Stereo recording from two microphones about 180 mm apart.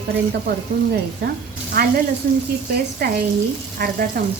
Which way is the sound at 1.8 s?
55° right (ahead or behind).